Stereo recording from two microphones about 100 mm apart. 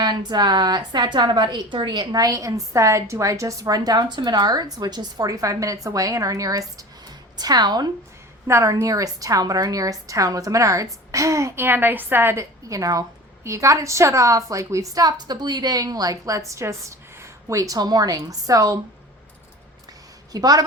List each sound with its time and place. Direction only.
0.0 s a woman's voice: 45° right (ahead or behind)
8.4 s a woman's voice: 30° right (ahead or behind)
20.3 s a woman's voice: 40° right (ahead or behind)